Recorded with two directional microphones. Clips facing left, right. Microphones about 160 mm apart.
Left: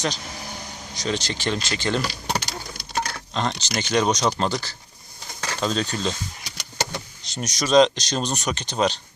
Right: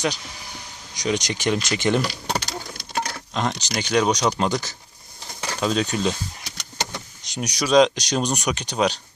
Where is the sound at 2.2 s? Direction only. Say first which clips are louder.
Right 1 dB; 5° left (ahead or behind).